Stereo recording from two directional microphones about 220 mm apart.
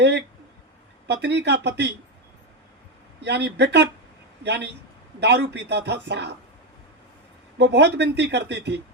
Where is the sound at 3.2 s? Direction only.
50° right (ahead or behind).